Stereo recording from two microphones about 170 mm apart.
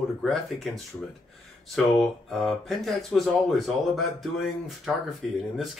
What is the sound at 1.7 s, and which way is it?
Speech, centre (ahead or behind).